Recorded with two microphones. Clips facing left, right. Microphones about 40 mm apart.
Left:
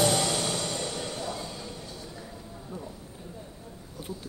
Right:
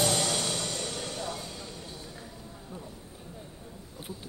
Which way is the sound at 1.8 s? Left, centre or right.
Right.